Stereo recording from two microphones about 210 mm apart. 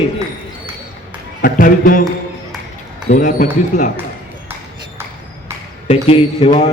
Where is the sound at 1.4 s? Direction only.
40° left (ahead or behind).